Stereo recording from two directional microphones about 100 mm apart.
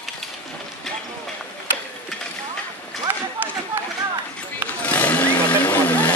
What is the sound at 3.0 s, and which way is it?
Run, 20° right (ahead or behind).